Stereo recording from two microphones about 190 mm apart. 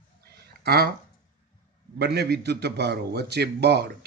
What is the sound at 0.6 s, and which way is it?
Speech, 55° right (ahead or behind).